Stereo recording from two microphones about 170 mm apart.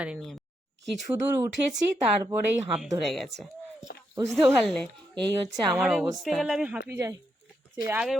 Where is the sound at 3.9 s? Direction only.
60° left (ahead or behind).